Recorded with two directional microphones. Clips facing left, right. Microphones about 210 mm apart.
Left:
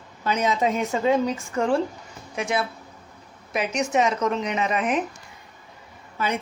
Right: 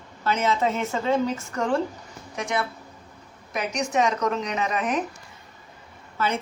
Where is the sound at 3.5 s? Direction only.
5° left (ahead or behind).